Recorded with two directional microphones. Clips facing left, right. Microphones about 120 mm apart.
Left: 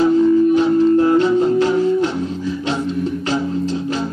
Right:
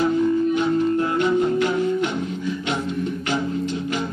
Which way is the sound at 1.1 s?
35° left (ahead or behind).